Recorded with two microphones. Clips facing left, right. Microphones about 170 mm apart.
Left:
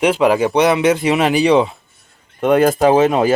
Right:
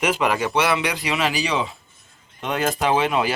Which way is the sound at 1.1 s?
55° left (ahead or behind).